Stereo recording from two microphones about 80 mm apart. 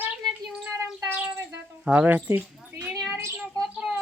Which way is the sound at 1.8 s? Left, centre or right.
Right.